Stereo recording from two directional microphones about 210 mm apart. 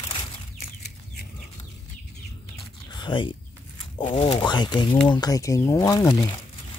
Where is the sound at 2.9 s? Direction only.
20° left (ahead or behind).